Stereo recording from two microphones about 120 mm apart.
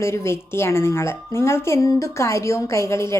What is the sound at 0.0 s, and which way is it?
A woman's voice, 20° left (ahead or behind).